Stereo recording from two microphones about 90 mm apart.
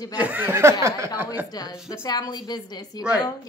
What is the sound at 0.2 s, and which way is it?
Speech, 20° right (ahead or behind).